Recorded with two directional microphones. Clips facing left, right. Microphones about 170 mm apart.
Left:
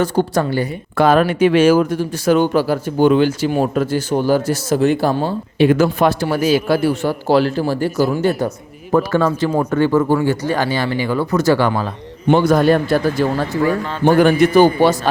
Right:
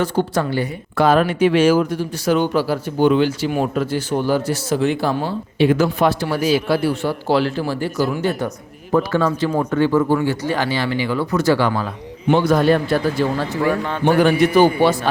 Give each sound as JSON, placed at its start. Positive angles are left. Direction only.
{"t": 0.0, "sound": "a woman's voice", "side_deg": 40}
{"t": 0.9, "sound": "a woman's voice", "side_deg": 55}